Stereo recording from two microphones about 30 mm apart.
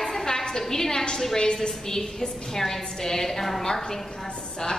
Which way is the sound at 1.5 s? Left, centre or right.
Centre.